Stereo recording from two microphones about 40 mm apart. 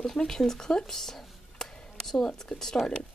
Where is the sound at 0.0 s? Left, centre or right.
Centre.